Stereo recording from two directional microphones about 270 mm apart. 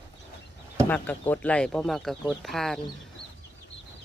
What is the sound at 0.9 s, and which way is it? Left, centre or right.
Speech, centre.